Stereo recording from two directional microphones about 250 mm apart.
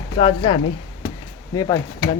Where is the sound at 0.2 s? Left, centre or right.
Left.